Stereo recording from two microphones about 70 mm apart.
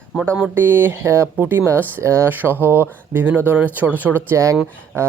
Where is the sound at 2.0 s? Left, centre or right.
Right.